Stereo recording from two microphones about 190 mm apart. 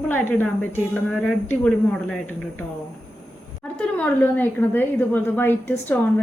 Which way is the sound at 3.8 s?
5° left (ahead or behind).